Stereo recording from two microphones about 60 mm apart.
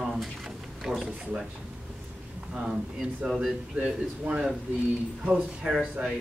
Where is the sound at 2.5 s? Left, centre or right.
Centre.